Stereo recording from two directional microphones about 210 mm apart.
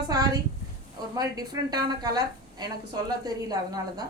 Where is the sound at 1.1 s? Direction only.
20° right (ahead or behind).